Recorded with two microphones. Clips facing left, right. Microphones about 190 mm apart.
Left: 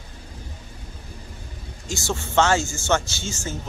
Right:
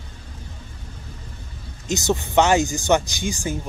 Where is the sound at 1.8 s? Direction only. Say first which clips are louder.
Right 6 dB; 20° right (ahead or behind).